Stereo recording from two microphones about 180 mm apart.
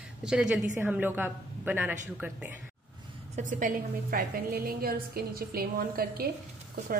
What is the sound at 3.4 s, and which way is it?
A woman's voice, 45° right (ahead or behind).